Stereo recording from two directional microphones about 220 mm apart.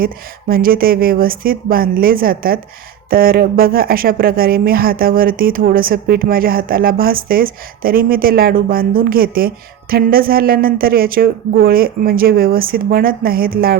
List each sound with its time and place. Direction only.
0.0 s speech: 40° right (ahead or behind)